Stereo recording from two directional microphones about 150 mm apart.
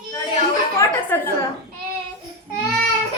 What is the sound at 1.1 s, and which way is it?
Speech, 15° left (ahead or behind).